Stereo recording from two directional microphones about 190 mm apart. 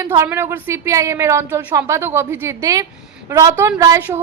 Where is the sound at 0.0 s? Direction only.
15° right (ahead or behind).